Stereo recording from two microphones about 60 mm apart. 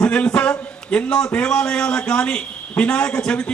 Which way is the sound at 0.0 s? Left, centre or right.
Centre.